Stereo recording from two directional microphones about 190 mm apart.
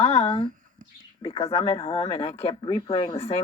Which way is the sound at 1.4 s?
20° left (ahead or behind).